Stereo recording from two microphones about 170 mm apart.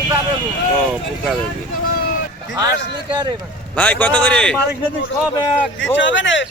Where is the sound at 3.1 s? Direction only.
25° right (ahead or behind).